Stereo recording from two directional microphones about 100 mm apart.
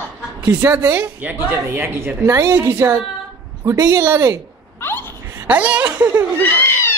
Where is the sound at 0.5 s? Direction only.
20° right (ahead or behind).